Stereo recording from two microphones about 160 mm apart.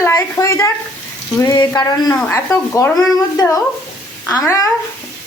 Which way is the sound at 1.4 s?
25° left (ahead or behind).